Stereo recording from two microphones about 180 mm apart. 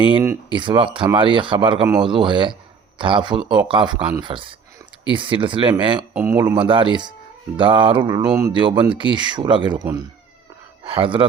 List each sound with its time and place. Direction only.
0.5 s speech: 25° right (ahead or behind)
6.1 s speech: 15° right (ahead or behind)
10.8 s speech: 30° right (ahead or behind)